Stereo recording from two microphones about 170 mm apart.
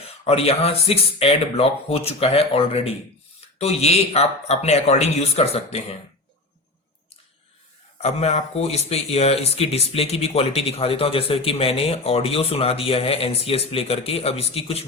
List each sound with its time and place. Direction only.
0.3 s speech: 35° left (ahead or behind)
8.0 s speech: 40° left (ahead or behind)